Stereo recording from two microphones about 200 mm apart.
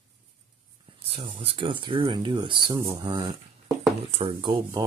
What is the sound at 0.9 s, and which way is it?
Speech, 30° right (ahead or behind).